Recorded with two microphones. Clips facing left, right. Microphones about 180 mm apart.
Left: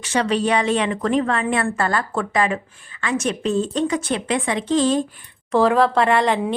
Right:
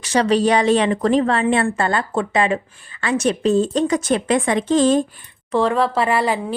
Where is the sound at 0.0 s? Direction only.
40° right (ahead or behind).